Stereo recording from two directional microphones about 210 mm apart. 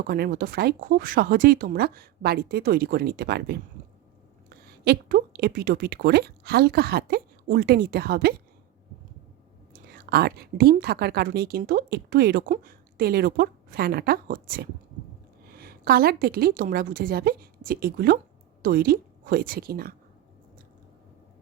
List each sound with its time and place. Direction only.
0.1 s a woman's voice: 45° right (ahead or behind)
9.9 s a woman's voice: 45° right (ahead or behind)